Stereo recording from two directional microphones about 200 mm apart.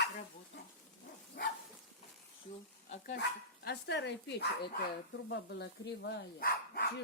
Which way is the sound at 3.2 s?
55° left (ahead or behind).